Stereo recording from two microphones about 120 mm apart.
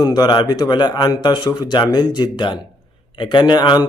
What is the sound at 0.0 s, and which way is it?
Speech, 35° left (ahead or behind).